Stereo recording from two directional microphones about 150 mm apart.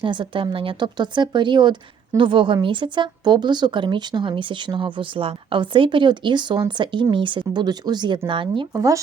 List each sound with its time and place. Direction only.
0.0 s speech: 35° right (ahead or behind)
8.7 s speech: 20° right (ahead or behind)